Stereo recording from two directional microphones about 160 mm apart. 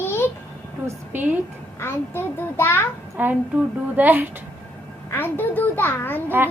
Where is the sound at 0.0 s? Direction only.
15° left (ahead or behind).